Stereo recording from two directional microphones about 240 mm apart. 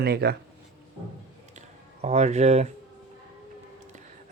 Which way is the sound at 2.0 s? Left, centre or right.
Right.